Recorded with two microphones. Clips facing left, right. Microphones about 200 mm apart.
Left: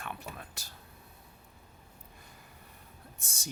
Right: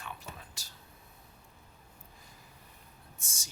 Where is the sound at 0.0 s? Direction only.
60° left (ahead or behind).